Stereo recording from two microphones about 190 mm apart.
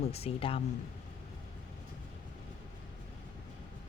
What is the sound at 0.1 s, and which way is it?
Speech, 30° left (ahead or behind).